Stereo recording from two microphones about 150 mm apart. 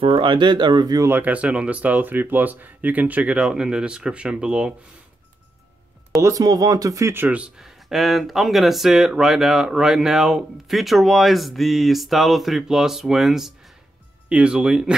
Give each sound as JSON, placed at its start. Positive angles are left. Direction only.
{"t": 0.0, "sound": "speech", "side_deg": -35}
{"t": 6.2, "sound": "speech", "side_deg": -25}